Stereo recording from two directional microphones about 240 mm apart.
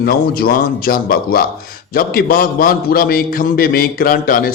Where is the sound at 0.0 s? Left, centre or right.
Left.